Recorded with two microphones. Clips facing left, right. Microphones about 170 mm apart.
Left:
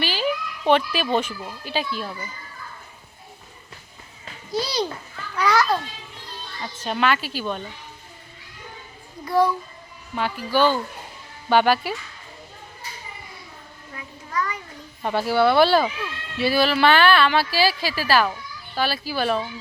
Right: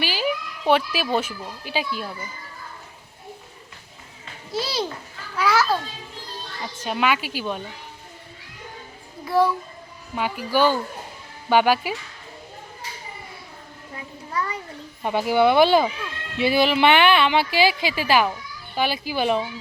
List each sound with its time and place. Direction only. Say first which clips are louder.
0.0 s a child's voice: even; 10° right (ahead or behind)
4.5 s a child's voice: left 2 dB; centre (ahead or behind)
5.4 s children playing: even; 5° right (ahead or behind)
6.8 s speech: even; 10° right (ahead or behind)
9.2 s a child's voice: even; centre (ahead or behind)
13.9 s a child's voice: even; 30° right (ahead or behind)
15.0 s speech: right 1 dB; 15° right (ahead or behind)